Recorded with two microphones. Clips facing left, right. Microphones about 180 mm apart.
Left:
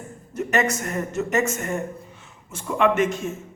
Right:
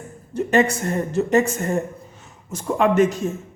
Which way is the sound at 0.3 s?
30° right (ahead or behind).